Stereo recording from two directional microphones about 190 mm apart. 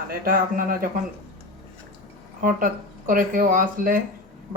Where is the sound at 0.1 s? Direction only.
50° right (ahead or behind).